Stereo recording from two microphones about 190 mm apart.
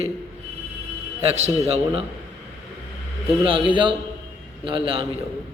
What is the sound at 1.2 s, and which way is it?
Speech, 35° right (ahead or behind).